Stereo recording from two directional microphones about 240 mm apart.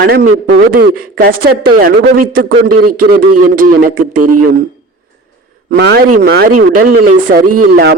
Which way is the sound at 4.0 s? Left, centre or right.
Right.